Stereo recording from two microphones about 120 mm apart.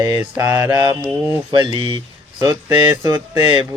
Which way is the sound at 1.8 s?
40° right (ahead or behind).